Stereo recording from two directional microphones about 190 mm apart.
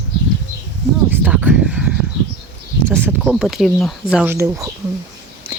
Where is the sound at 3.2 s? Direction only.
Centre (ahead or behind).